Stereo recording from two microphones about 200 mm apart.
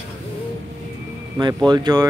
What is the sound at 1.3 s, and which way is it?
Speech, 20° right (ahead or behind).